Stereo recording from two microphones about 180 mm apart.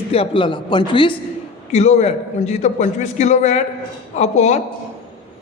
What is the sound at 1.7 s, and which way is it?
A man's voice, 40° left (ahead or behind).